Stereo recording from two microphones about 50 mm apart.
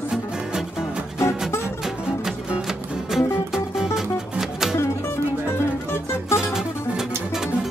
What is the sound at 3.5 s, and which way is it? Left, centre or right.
Music, centre.